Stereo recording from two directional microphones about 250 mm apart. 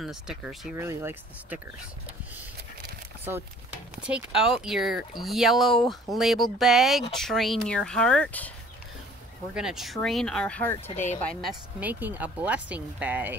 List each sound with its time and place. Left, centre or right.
0.0 s speech: centre
3.3 s a sound: centre
4.4 s speech: centre
9.5 s speech: centre
10.9 s speech: left
11.2 s speech: centre